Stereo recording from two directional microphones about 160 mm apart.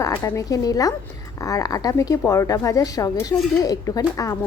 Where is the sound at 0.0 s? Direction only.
20° left (ahead or behind).